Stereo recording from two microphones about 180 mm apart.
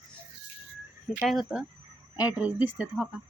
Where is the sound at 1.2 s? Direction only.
Centre (ahead or behind).